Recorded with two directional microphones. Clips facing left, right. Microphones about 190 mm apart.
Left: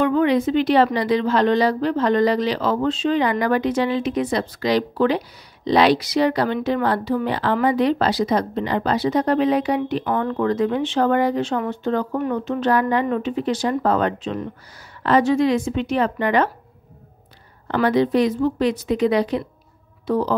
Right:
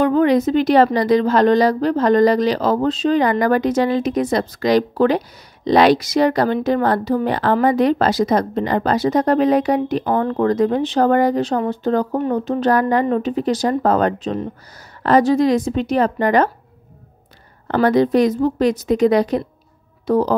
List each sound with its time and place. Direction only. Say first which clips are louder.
0.0 s a woman's voice: right 3 dB; 40° right (ahead or behind)
17.6 s speech: right 3 dB; 45° right (ahead or behind)